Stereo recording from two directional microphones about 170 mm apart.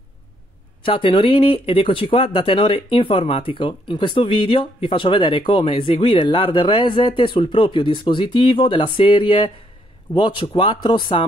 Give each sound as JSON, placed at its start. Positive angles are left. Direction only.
{"t": 0.8, "sound": "speech", "side_deg": 30}